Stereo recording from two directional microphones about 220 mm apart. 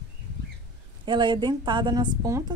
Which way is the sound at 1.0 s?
20° right (ahead or behind).